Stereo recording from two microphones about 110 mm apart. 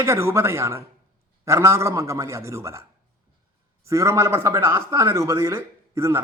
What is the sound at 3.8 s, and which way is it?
A man's voice, 25° right (ahead or behind).